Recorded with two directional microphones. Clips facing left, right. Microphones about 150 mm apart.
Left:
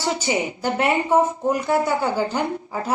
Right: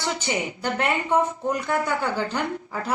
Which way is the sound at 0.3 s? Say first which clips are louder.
Left 4 dB; 25° left (ahead or behind).